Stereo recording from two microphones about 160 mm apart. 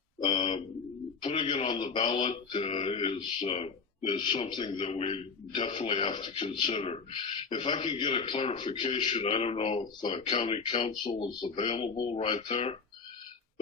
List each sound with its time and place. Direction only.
0.3 s speech: 40° left (ahead or behind)
11.0 s speech: 30° left (ahead or behind)